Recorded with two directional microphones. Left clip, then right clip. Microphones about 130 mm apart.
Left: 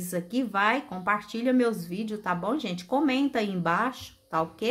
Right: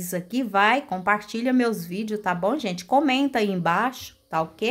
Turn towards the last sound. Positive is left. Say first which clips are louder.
# right 2 dB
turn(degrees=-25)  # may be behind; listen again after turning